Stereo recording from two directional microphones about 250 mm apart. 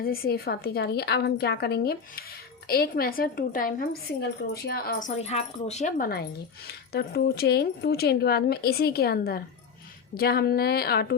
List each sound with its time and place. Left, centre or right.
0.0 s a woman's voice: left